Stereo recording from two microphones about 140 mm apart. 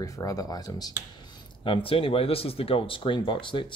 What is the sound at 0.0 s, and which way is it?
Speech, 25° left (ahead or behind).